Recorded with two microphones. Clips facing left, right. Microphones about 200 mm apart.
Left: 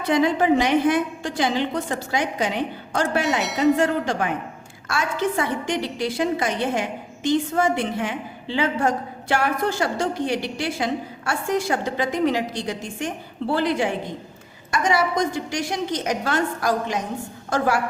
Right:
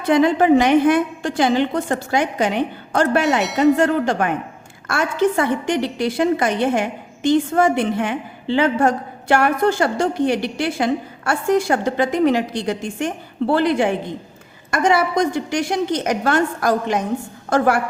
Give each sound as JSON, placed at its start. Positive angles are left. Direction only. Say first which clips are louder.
{"t": 0.1, "sound": "a woman's voice", "louder": "right 5 dB", "side_deg": -55}